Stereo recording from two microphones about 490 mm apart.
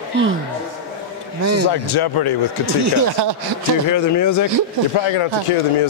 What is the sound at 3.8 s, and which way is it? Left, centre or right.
Speech, left.